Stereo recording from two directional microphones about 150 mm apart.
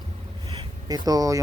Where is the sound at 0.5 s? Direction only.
25° right (ahead or behind).